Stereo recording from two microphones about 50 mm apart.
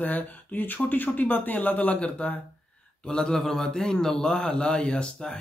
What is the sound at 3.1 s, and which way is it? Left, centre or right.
A man's voice, centre.